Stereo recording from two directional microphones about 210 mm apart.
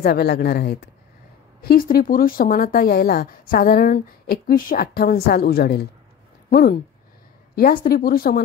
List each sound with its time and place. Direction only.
0.0 s speech: 50° left (ahead or behind)
7.5 s speech: 45° left (ahead or behind)